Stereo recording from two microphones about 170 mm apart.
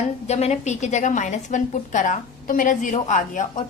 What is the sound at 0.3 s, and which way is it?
A woman's voice, 40° left (ahead or behind).